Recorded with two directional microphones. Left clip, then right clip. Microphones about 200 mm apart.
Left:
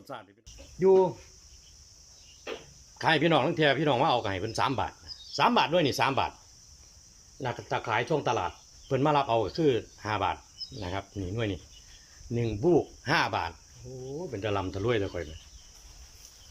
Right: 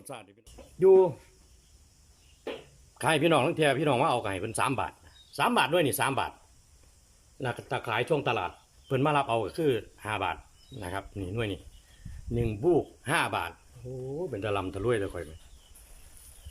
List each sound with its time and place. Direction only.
0.1 s speech: 10° right (ahead or behind)
3.0 s speech: 5° right (ahead or behind)
7.3 s speech: 5° right (ahead or behind)